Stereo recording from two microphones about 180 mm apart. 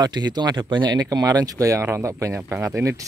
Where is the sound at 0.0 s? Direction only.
25° right (ahead or behind).